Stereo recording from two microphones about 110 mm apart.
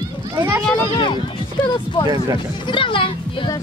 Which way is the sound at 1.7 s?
45° left (ahead or behind).